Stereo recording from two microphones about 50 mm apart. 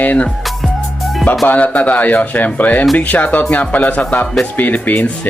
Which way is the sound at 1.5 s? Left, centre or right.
Left.